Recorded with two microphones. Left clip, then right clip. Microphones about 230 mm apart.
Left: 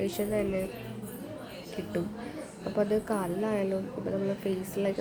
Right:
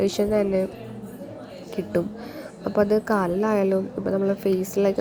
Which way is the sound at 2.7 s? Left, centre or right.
Right.